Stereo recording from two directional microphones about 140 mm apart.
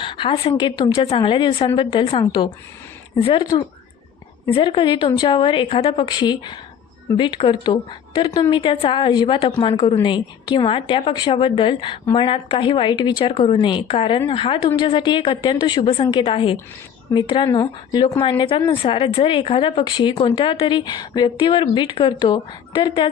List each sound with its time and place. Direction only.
0.0 s a woman's voice: 40° left (ahead or behind)
4.5 s a woman's voice: 40° left (ahead or behind)